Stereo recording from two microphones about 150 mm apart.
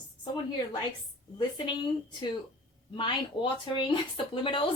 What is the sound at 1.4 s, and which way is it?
Speech, 30° left (ahead or behind).